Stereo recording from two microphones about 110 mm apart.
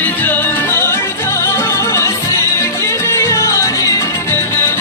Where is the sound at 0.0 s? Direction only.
15° left (ahead or behind).